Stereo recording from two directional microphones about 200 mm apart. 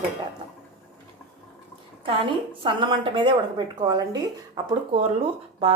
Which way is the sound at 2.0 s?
25° right (ahead or behind).